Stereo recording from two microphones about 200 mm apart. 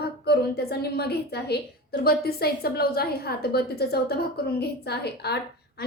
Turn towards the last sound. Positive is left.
turn(degrees=55)  # may be behind; listen again after turning